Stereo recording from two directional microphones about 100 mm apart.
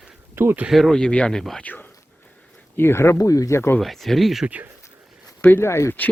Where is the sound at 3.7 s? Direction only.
5° left (ahead or behind).